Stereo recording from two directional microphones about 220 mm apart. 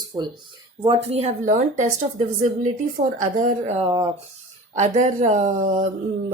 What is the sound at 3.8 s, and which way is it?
Speech, 20° right (ahead or behind).